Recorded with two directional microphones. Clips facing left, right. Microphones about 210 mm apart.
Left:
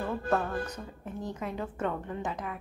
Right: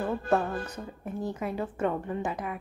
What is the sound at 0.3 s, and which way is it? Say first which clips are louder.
A woman's voice: right 2 dB; 10° right (ahead or behind).